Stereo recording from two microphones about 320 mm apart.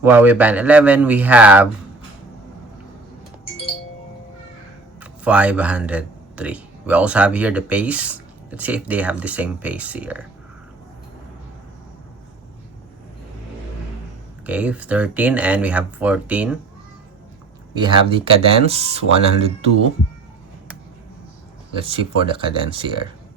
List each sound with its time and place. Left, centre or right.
0.0 s speech: centre
4.9 s speech: centre
14.4 s speech: centre
17.7 s speech: centre
21.8 s speech: centre